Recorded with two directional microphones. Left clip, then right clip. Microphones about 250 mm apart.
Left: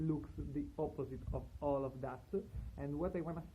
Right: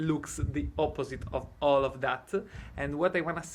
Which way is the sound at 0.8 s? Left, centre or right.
Centre.